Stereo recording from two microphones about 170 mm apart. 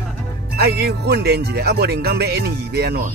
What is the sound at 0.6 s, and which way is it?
Speech, 70° right (ahead or behind).